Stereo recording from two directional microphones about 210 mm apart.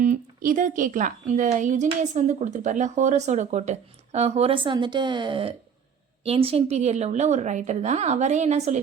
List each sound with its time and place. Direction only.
0.0 s a woman's voice: 40° right (ahead or behind)